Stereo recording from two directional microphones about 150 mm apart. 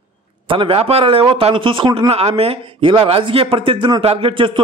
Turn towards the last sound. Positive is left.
turn(degrees=-35)  # may be behind; listen again after turning